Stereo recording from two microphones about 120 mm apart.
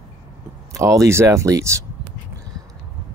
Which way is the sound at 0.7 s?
25° right (ahead or behind).